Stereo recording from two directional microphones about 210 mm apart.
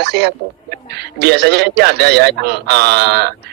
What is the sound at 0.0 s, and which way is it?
A man's voice, 55° right (ahead or behind).